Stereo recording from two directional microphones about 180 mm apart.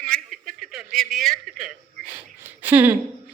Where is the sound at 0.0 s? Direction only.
5° left (ahead or behind).